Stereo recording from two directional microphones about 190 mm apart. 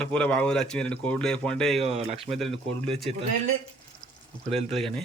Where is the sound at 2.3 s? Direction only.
5° left (ahead or behind).